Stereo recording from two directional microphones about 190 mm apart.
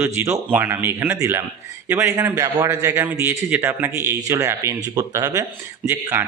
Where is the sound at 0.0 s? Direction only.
10° right (ahead or behind).